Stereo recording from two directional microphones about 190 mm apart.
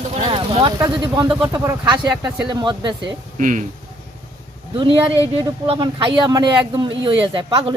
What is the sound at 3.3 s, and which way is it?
Speech, 40° right (ahead or behind).